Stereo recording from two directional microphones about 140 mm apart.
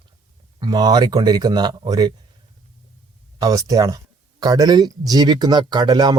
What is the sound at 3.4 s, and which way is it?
Speech, 25° right (ahead or behind).